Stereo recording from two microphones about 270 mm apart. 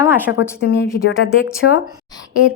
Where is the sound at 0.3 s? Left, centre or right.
Left.